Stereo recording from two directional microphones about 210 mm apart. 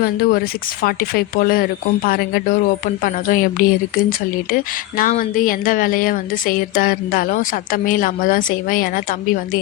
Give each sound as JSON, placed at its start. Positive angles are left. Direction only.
{"t": 0.0, "sound": "speech", "side_deg": 45}